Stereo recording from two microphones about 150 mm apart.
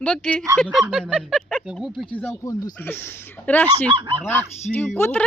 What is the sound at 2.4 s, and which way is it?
Speech, 25° left (ahead or behind).